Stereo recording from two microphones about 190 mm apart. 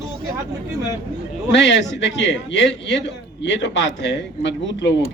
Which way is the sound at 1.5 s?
70° left (ahead or behind).